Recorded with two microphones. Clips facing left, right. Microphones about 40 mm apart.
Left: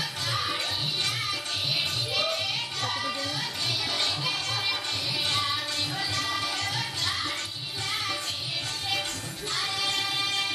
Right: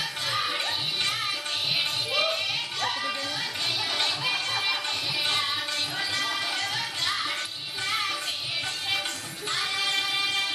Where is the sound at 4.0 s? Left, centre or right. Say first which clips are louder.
Right 2 dB; right.